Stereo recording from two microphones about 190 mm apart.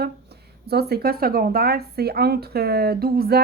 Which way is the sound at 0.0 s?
55° right (ahead or behind).